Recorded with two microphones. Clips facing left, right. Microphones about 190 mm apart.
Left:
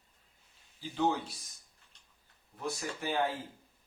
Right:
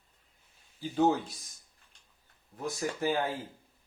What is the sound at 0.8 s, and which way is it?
Speech, 45° right (ahead or behind).